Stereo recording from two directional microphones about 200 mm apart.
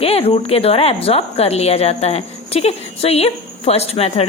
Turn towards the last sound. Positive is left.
turn(degrees=30)  # may be behind; listen again after turning